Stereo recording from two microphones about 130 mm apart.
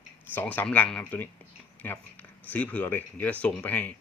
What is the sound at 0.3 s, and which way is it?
Speech, 15° left (ahead or behind).